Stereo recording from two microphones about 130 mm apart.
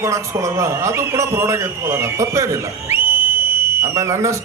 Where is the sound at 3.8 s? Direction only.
20° right (ahead or behind).